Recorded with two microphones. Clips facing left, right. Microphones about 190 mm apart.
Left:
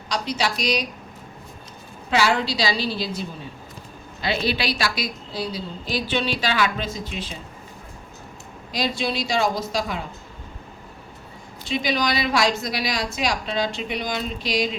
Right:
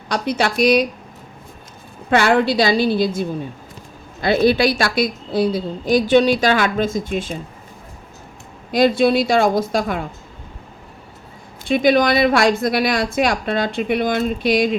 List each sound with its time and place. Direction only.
0.1 s a woman's voice: 55° right (ahead or behind)
2.0 s a woman's voice: 55° right (ahead or behind)
8.7 s a woman's voice: 55° right (ahead or behind)
11.7 s a woman's voice: 55° right (ahead or behind)